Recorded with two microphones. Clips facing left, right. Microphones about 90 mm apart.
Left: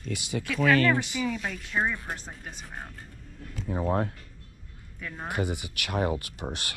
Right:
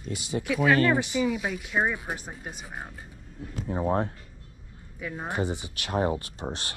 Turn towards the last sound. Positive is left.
turn(degrees=-30)  # may be behind; listen again after turning